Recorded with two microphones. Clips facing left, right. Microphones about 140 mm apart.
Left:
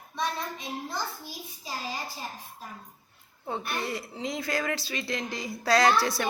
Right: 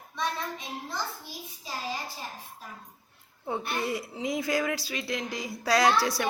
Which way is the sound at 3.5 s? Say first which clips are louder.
Right 2 dB; 15° right (ahead or behind).